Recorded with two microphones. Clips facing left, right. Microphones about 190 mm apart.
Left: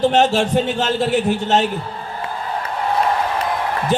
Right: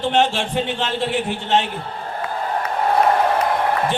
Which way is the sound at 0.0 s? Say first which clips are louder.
Left 4 dB; 40° left (ahead or behind).